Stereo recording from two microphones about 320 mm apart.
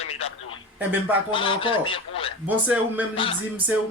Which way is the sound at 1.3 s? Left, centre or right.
Centre.